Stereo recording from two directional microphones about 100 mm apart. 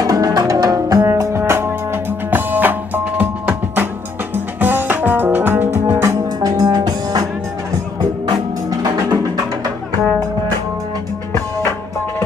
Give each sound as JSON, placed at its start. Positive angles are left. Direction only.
{"t": 0.0, "sound": "music", "side_deg": -40}
{"t": 6.0, "sound": "music", "side_deg": -35}